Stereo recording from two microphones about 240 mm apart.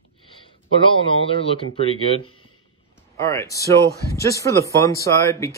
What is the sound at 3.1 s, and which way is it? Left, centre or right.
Speech, centre.